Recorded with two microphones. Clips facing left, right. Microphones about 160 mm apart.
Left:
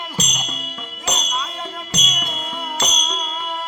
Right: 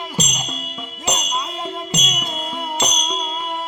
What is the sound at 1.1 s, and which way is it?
Music, 20° right (ahead or behind).